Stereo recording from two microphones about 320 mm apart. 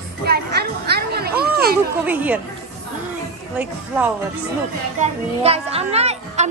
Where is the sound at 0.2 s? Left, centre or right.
Right.